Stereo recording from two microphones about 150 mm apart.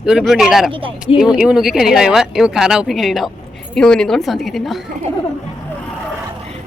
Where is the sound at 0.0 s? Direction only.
5° right (ahead or behind).